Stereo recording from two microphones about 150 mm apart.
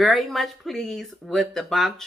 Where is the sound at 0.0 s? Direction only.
Centre (ahead or behind).